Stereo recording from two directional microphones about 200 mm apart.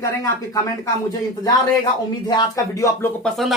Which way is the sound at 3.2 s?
Centre (ahead or behind).